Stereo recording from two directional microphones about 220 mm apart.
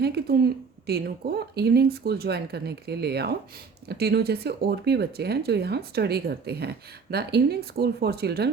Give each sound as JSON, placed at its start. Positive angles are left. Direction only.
{"t": 0.0, "sound": "speech", "side_deg": -45}